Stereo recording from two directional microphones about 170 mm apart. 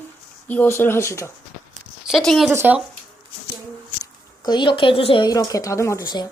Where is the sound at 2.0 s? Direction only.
Centre (ahead or behind).